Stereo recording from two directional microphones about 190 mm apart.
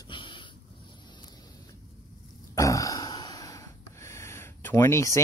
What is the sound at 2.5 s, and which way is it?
Gasp, 15° left (ahead or behind).